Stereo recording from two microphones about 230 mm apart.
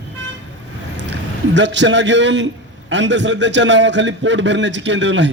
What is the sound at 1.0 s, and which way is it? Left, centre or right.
A man's voice, right.